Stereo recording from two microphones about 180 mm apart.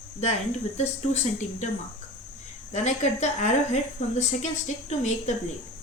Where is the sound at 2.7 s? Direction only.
40° left (ahead or behind).